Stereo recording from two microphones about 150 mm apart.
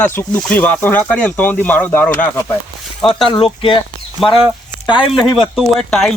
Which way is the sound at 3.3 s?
35° left (ahead or behind).